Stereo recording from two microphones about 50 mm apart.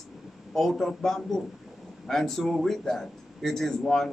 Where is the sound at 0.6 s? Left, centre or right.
Centre.